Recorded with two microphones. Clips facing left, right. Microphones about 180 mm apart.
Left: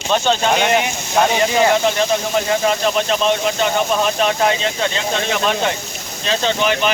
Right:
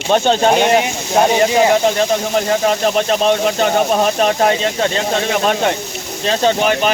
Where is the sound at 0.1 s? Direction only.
45° right (ahead or behind).